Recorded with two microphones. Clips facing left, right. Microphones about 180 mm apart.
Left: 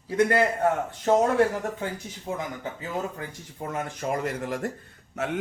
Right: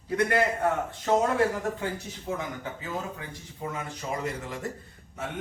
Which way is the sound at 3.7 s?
55° left (ahead or behind).